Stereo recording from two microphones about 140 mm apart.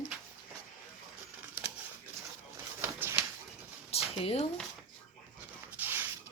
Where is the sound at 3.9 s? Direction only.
45° left (ahead or behind).